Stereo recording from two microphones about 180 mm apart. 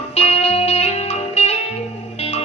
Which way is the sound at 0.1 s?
35° left (ahead or behind).